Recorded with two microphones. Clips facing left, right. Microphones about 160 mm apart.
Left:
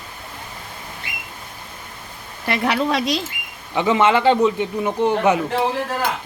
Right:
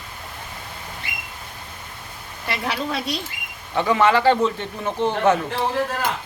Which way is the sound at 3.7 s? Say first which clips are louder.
Left 1 dB; 20° left (ahead or behind).